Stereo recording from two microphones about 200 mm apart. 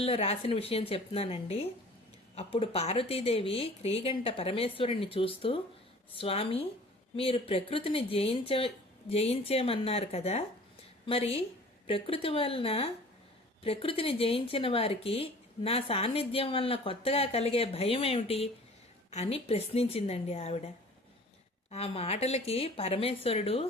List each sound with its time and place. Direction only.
0.0 s a woman's voice: 30° left (ahead or behind)
21.7 s speech: 30° left (ahead or behind)